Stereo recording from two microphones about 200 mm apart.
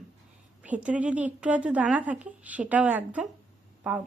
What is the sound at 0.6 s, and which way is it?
A woman's voice, 5° right (ahead or behind).